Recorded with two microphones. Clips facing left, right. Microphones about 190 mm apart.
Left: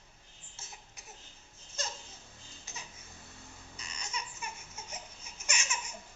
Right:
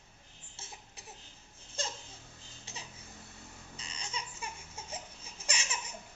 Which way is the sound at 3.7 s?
30° right (ahead or behind).